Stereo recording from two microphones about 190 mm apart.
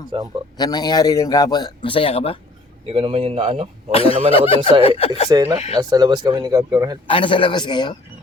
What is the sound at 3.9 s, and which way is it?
A man's voice, 30° left (ahead or behind).